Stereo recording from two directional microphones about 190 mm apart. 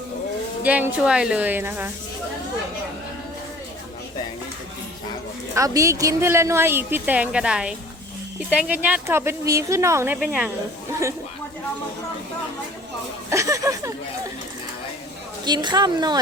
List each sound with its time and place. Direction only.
0.6 s a woman's voice: 10° right (ahead or behind)
5.5 s a woman's voice: 15° right (ahead or behind)
13.3 s a woman's voice: 15° right (ahead or behind)
15.4 s speech: 20° right (ahead or behind)